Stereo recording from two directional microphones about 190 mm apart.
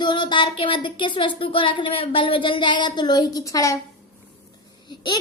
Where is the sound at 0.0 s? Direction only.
25° left (ahead or behind).